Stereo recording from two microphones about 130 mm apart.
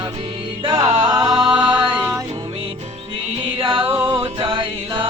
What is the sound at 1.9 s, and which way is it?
Music, 15° right (ahead or behind).